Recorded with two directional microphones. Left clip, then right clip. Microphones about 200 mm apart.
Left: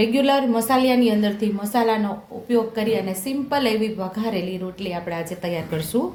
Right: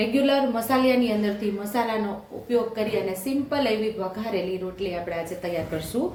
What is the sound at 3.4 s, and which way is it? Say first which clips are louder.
A woman's voice: left 4 dB; 55° left (ahead or behind).